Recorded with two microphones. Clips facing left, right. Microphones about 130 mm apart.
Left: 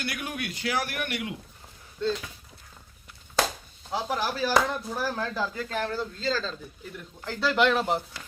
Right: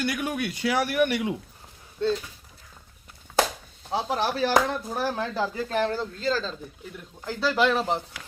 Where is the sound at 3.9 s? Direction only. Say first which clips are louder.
Right 3 dB; 25° right (ahead or behind); by 7.8 s centre (ahead or behind).